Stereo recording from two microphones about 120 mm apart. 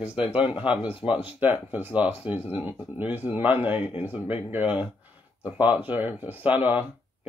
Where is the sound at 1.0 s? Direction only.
15° right (ahead or behind).